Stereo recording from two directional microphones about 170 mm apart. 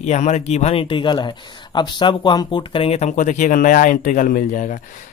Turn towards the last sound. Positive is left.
turn(degrees=50)  # may be behind; listen again after turning